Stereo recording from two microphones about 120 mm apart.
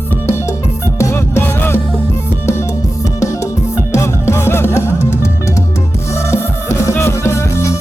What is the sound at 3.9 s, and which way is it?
Music, 25° left (ahead or behind).